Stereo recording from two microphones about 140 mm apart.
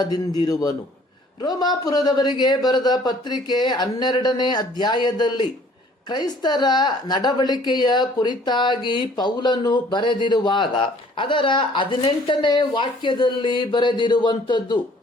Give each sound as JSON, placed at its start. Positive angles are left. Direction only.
{"t": 0.0, "sound": "a man's voice", "side_deg": 30}